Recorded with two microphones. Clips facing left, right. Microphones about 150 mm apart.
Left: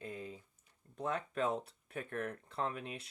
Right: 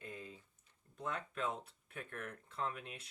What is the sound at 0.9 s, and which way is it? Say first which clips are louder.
Speech: left 5 dB; 35° left (ahead or behind).